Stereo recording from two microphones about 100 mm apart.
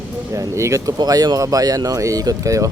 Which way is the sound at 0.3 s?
30° right (ahead or behind).